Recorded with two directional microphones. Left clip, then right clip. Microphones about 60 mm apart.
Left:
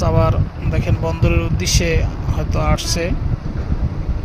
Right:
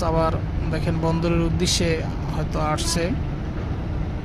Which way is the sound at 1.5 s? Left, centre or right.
Centre.